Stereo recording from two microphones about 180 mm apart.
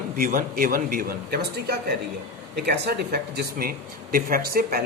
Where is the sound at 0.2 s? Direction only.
50° right (ahead or behind).